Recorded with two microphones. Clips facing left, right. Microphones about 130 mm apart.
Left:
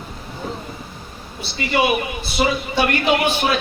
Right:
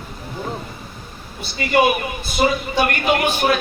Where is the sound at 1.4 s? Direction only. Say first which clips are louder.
Right 3 dB; 50° right (ahead or behind).